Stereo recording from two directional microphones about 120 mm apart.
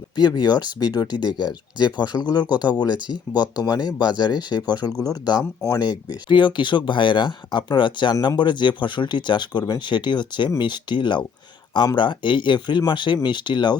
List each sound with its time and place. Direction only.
0.2 s speech: 35° left (ahead or behind)